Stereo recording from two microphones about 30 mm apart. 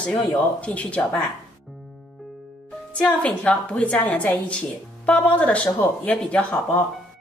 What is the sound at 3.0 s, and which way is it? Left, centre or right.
A woman's voice, left.